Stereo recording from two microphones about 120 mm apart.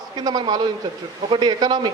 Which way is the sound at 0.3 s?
35° right (ahead or behind).